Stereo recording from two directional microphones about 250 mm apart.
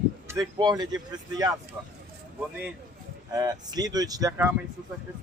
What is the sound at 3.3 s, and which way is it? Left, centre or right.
A man's voice, centre.